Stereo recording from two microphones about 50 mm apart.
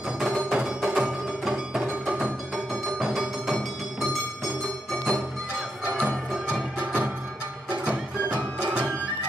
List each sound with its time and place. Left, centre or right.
0.2 s music: centre
5.9 s music: right